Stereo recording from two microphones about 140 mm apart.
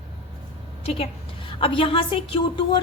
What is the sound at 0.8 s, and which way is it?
A woman's voice, 45° left (ahead or behind).